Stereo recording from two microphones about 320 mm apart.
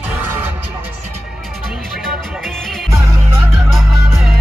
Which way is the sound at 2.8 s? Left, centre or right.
Centre.